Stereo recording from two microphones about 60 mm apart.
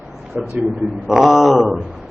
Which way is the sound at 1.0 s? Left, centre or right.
Centre.